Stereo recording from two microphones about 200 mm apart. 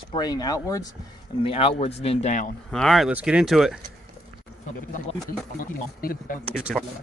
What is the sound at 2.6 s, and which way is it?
Speech, centre (ahead or behind).